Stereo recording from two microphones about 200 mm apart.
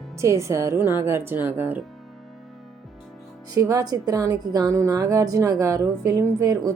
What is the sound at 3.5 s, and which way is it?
Speech, 20° right (ahead or behind).